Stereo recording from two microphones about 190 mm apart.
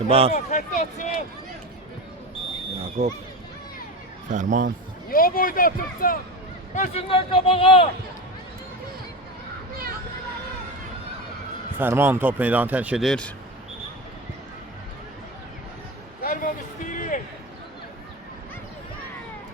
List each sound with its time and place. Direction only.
0.1 s speech: 30° right (ahead or behind)
0.3 s speech: 40° left (ahead or behind)
3.0 s speech: 35° right (ahead or behind)
4.3 s speech: 40° right (ahead or behind)
5.0 s speech: 50° left (ahead or behind)
6.7 s speech: 35° left (ahead or behind)
11.8 s speech: 10° right (ahead or behind)
16.2 s music: 45° left (ahead or behind)